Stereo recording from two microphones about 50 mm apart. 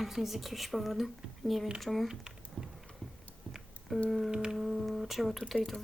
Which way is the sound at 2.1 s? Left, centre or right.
Centre.